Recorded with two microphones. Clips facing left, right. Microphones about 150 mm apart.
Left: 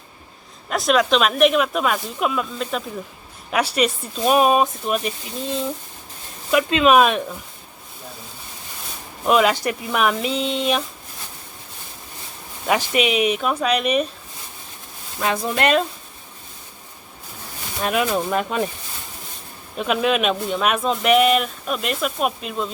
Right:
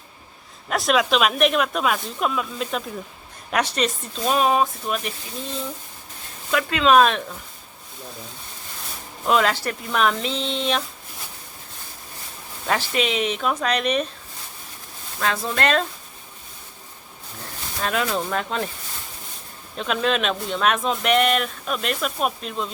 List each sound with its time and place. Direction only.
0.7 s speech: centre (ahead or behind)
9.2 s speech: 15° left (ahead or behind)
12.6 s speech: 15° left (ahead or behind)
15.2 s speech: 15° left (ahead or behind)
17.8 s speech: 15° left (ahead or behind)
19.7 s speech: 10° left (ahead or behind)